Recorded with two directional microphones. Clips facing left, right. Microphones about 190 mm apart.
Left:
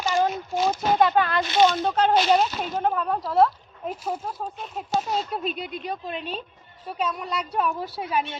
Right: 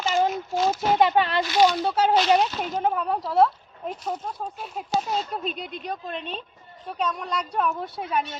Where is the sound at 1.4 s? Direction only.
25° left (ahead or behind).